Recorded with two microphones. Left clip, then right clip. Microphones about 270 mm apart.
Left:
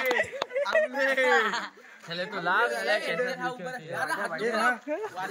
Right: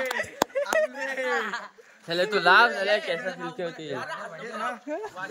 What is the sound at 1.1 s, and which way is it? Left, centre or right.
Speech, left.